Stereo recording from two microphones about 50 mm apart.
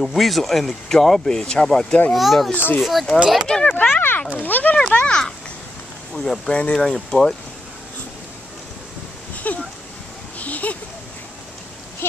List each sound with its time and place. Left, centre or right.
0.0 s speech: centre
2.1 s speech: centre
2.5 s speech: left
2.8 s speech: centre
3.4 s speech: centre
3.7 s speech: left
4.9 s speech: left
6.1 s speech: centre
9.5 s a sound: left